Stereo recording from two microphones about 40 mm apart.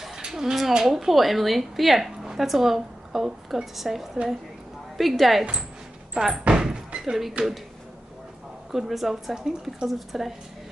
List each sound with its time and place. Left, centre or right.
0.3 s a sound: centre
0.6 s a woman's voice: centre
6.2 s speech: centre
6.5 s thunk: centre
7.0 s speech: centre
8.7 s speech: centre